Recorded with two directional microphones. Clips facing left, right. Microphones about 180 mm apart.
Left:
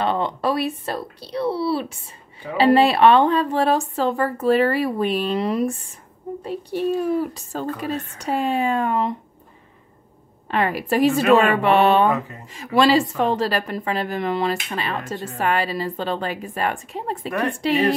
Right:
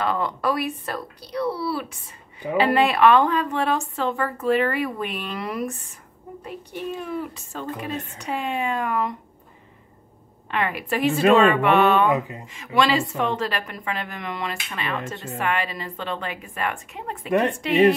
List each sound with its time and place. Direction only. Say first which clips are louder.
0.0 s a woman's voice: left 2 dB; 25° left (ahead or behind)
10.5 s a woman's voice: left 4 dB; 35° left (ahead or behind)
17.3 s speech: right 4 dB; 25° right (ahead or behind)